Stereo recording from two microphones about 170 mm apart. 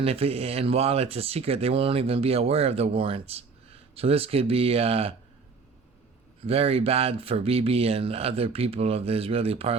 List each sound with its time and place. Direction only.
0.0 s speech: 35° right (ahead or behind)
6.5 s speech: 35° right (ahead or behind)